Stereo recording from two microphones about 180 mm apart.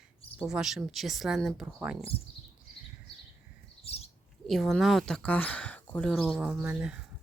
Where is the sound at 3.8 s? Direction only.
35° left (ahead or behind).